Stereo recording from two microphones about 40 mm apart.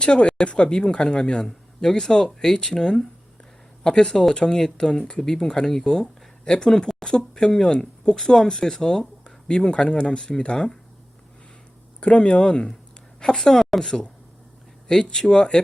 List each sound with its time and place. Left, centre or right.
0.0 s speech: left
11.9 s speech: left
13.1 s speech: centre
15.1 s speech: centre